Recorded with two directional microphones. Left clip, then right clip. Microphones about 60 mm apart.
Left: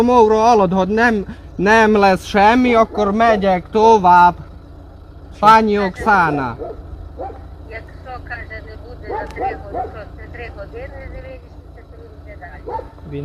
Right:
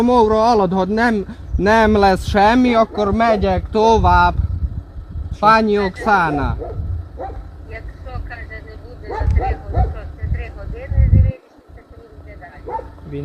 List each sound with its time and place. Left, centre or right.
0.0 s a man's voice: centre
1.1 s a man's voice: right
5.5 s a man's voice: centre
7.7 s vehicle: right
9.4 s a sound: right
12.4 s bow-wow: right